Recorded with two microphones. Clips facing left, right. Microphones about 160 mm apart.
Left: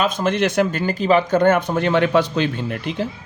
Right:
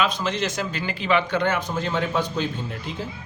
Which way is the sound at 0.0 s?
50° left (ahead or behind).